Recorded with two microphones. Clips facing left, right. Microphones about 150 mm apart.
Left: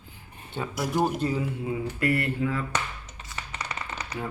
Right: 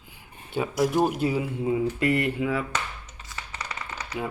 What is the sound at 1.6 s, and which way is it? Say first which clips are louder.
Speech: right 4 dB; 25° right (ahead or behind).